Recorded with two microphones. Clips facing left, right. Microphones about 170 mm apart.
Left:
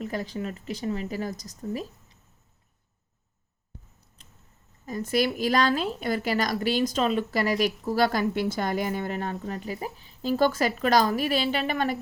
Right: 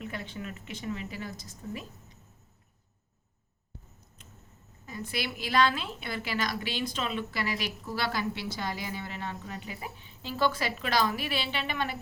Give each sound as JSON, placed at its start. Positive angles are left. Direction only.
{"t": 0.0, "sound": "speech", "side_deg": 40}
{"t": 4.2, "sound": "a sound", "side_deg": 35}
{"t": 4.9, "sound": "a woman's voice", "side_deg": 45}